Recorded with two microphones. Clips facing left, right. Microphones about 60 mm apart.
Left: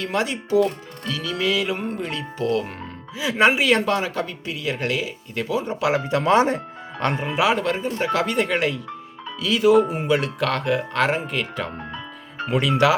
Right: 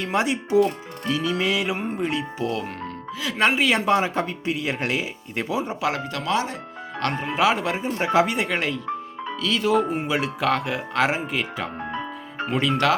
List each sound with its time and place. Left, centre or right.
0.0 s speech: centre
3.2 s speech: centre
3.8 s speech: right
6.1 s speech: left
6.3 s speech: left
7.0 s speech: centre
8.4 s speech: centre
11.9 s music: right
12.5 s speech: centre